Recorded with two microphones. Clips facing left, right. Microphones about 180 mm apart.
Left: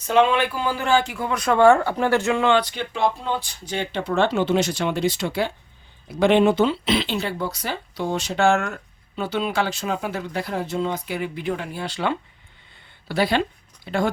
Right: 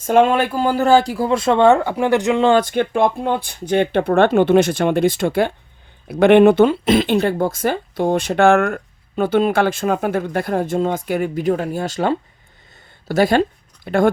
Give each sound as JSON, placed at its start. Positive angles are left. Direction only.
{"t": 0.0, "sound": "speech", "side_deg": -50}
{"t": 2.6, "sound": "speech", "side_deg": -50}
{"t": 6.1, "sound": "speech", "side_deg": -60}